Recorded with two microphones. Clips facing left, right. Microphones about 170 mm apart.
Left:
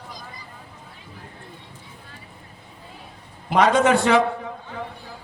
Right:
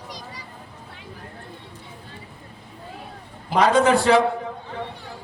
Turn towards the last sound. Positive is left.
turn(degrees=-35)  # may be behind; listen again after turning